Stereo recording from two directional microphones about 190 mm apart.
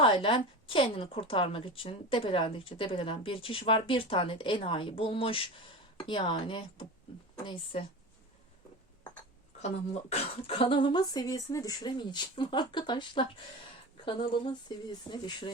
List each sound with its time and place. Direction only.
0.0 s a woman's voice: 30° left (ahead or behind)
9.6 s a woman's voice: 35° left (ahead or behind)